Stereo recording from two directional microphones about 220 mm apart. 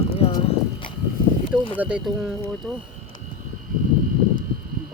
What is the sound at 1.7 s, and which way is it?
Speech, 5° right (ahead or behind).